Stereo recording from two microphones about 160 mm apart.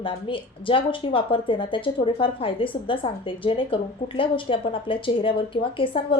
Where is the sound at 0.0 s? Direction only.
35° left (ahead or behind).